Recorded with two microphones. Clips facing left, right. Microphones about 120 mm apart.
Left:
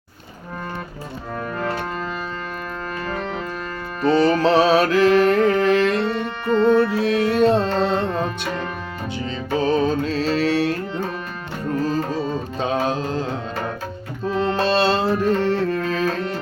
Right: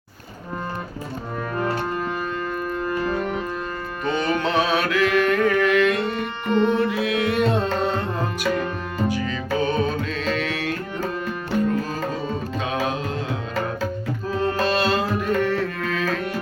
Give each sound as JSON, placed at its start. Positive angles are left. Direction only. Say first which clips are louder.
{"t": 2.9, "sound": "organ", "louder": "right 3 dB", "side_deg": -15}
{"t": 4.0, "sound": "music", "louder": "left 7 dB", "side_deg": 35}
{"t": 12.8, "sound": "music", "louder": "left 3 dB", "side_deg": 30}
{"t": 14.3, "sound": "music", "louder": "left 3 dB", "side_deg": 30}